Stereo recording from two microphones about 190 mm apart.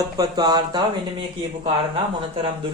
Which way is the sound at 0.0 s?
20° right (ahead or behind).